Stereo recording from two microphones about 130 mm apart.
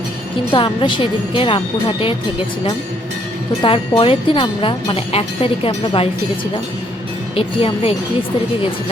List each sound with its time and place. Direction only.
0.5 s speech: 40° left (ahead or behind)
3.6 s speech: 40° left (ahead or behind)
7.3 s speech: 45° left (ahead or behind)